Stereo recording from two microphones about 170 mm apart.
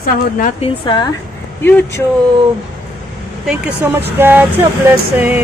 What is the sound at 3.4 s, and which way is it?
Speech, 10° right (ahead or behind).